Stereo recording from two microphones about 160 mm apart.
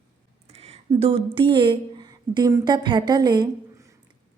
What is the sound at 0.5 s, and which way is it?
Speech, 40° right (ahead or behind).